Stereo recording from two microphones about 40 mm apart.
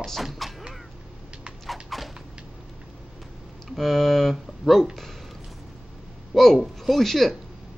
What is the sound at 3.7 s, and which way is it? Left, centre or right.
Speech, centre.